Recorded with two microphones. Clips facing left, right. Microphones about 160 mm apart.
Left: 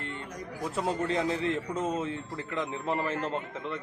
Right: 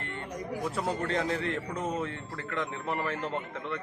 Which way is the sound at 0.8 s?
20° left (ahead or behind).